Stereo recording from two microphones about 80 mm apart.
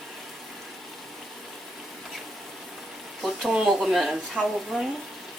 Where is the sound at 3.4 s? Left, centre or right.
Centre.